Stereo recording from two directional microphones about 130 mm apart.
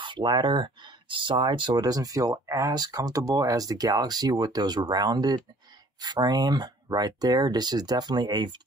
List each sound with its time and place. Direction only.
0.0 s speech: 35° right (ahead or behind)